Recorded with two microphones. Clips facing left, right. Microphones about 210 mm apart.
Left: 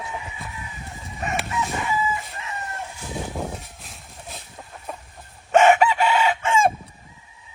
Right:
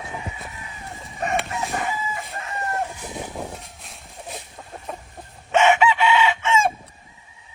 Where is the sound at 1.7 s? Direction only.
50° right (ahead or behind).